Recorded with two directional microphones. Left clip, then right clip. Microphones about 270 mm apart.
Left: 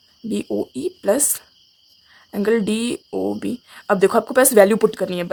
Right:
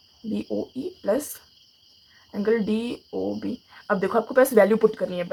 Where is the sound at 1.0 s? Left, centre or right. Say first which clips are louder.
Left 5 dB; left.